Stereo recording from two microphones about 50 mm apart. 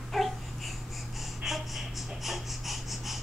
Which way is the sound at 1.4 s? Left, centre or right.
Centre.